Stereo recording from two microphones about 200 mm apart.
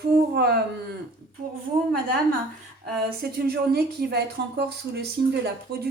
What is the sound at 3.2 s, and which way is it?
A woman's voice, 50° right (ahead or behind).